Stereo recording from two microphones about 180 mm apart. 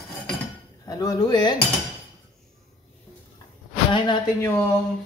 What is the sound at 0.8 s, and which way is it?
Speech, 20° left (ahead or behind).